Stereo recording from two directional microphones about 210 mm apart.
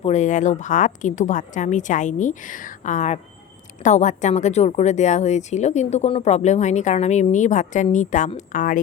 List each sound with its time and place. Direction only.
0.0 s a woman's voice: 35° left (ahead or behind)